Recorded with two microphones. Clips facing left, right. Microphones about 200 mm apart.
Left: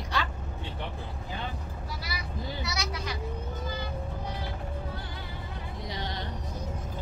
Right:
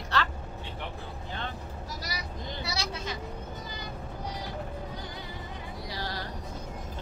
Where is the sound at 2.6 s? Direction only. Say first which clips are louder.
Even; 30° right (ahead or behind).